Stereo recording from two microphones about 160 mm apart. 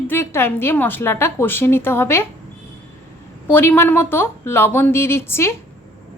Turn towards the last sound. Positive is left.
turn(degrees=15)  # may be behind; listen again after turning